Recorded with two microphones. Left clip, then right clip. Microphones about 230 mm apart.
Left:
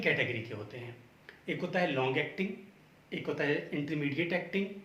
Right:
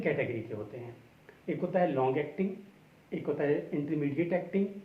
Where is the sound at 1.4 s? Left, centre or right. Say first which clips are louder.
Right 3 dB; left.